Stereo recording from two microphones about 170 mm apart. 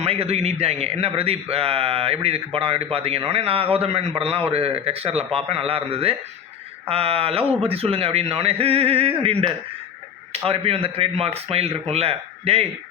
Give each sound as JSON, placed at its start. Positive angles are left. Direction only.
{"t": 0.0, "sound": "a man's voice", "side_deg": -35}